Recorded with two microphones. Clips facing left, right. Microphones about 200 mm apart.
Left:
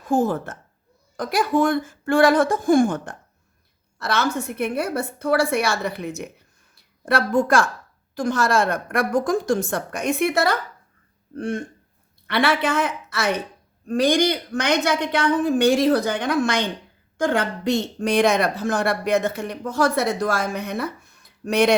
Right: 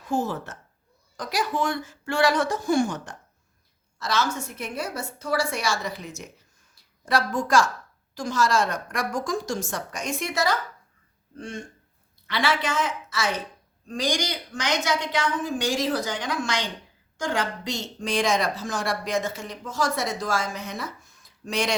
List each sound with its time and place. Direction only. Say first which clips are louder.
0.0 s a woman's voice: left 6 dB; 50° left (ahead or behind)